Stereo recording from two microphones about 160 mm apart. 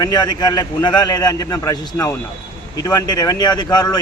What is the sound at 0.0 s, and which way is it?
Speech, 25° left (ahead or behind).